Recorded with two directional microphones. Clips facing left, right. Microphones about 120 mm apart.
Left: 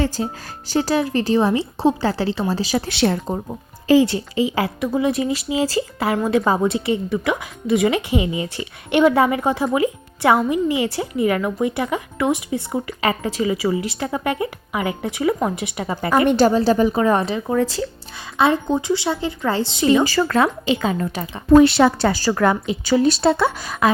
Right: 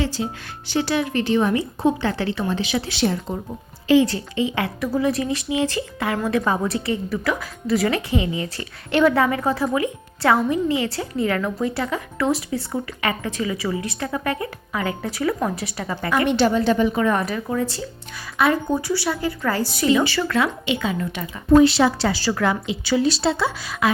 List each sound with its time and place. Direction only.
0.2 s a woman's voice: 40° left (ahead or behind)
2.9 s speech: 65° left (ahead or behind)
4.0 s a woman's voice: 25° left (ahead or behind)
16.0 s a woman's voice: 35° left (ahead or behind)
17.6 s speech: 90° left
18.3 s speech: 25° left (ahead or behind)
20.1 s a woman's voice: 40° left (ahead or behind)
21.5 s a woman's voice: 60° left (ahead or behind)